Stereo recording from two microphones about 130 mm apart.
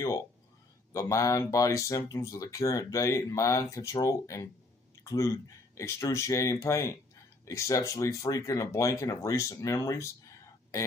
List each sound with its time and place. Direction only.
0.9 s speech: 25° left (ahead or behind)